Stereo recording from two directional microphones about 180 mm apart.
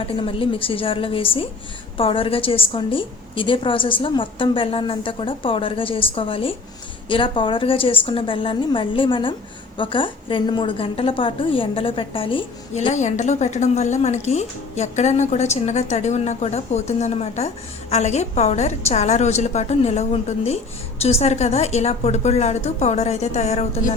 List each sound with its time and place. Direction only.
0.0 s a woman's voice: 30° left (ahead or behind)
12.9 s a woman's voice: 40° left (ahead or behind)